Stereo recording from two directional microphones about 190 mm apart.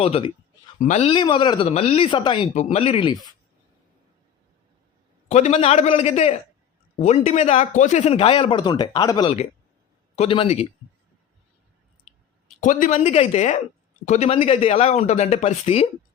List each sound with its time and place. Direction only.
0.0 s speech: 30° left (ahead or behind)
5.3 s speech: 35° left (ahead or behind)
12.5 s speech: 45° left (ahead or behind)